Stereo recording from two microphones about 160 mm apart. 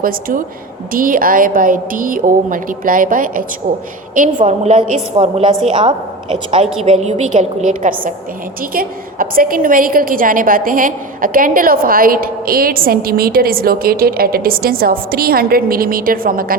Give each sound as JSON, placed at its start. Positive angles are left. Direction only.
{"t": 0.0, "sound": "a woman's voice", "side_deg": -60}
{"t": 4.8, "sound": "a woman's voice", "side_deg": -35}